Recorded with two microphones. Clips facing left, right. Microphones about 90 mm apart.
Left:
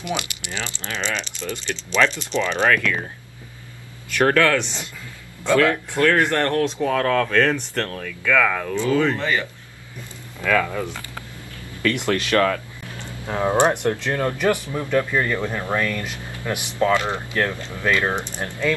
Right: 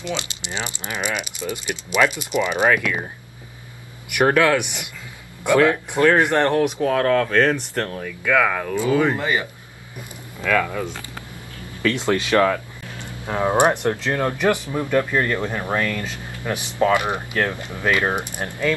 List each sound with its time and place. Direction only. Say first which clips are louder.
0.0 s speech: left 1 dB; 20° right (ahead or behind)
4.1 s speech: right 1 dB; 15° right (ahead or behind)
10.5 s speech: even; 5° right (ahead or behind)
11.8 s speech: right 1 dB; 20° right (ahead or behind)